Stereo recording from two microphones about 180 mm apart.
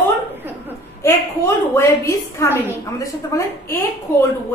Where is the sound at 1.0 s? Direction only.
15° left (ahead or behind).